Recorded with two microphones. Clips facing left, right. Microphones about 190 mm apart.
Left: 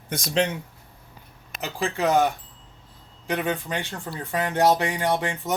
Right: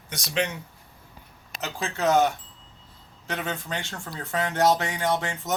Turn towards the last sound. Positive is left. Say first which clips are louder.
# left 2 dB
turn(degrees=15)  # may be behind; listen again after turning